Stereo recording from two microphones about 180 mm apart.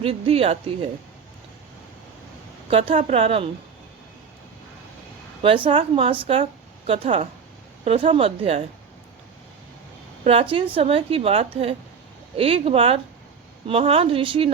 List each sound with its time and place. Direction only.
0.0 s a woman's voice: 30° right (ahead or behind)
2.6 s a woman's voice: 30° right (ahead or behind)
5.4 s a woman's voice: 30° right (ahead or behind)
10.2 s a woman's voice: 30° right (ahead or behind)